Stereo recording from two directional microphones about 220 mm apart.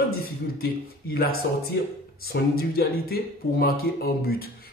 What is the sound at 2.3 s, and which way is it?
Speech, 45° left (ahead or behind).